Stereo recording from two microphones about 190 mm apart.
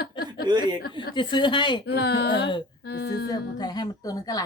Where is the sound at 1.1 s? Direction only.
25° left (ahead or behind).